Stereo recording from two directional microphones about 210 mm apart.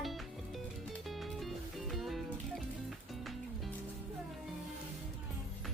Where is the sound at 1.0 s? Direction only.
Centre (ahead or behind).